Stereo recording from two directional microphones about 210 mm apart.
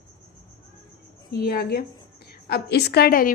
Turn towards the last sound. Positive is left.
turn(degrees=45)  # may be behind; listen again after turning